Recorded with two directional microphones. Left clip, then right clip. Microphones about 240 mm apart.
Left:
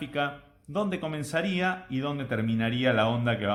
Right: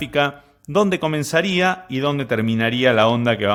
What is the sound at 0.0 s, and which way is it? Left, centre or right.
Speech, right.